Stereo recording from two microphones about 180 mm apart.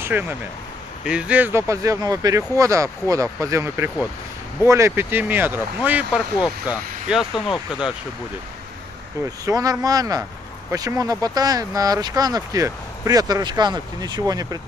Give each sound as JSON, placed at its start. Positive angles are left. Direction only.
{"t": 0.0, "sound": "speech", "side_deg": -10}
{"t": 7.3, "sound": "speech", "side_deg": 25}
{"t": 9.5, "sound": "speech", "side_deg": -20}